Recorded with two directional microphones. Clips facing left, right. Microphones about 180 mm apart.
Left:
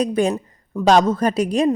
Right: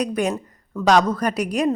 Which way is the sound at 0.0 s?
30° left (ahead or behind).